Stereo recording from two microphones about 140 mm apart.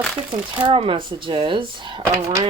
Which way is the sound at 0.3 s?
35° right (ahead or behind).